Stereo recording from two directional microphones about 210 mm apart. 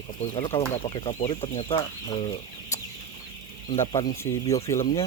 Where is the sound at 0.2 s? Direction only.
25° left (ahead or behind).